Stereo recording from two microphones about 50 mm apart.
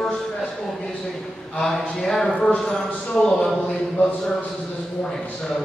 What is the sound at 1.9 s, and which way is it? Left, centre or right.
Speech, centre.